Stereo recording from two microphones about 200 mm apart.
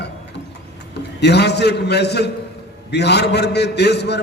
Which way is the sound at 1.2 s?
55° left (ahead or behind).